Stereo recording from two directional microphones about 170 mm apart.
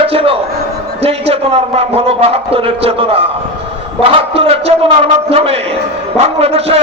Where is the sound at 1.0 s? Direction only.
35° right (ahead or behind).